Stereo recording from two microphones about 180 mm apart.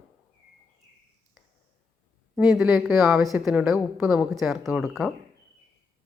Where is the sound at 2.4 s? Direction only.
5° right (ahead or behind).